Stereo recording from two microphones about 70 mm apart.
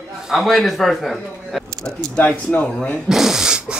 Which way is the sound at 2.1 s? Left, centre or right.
Left.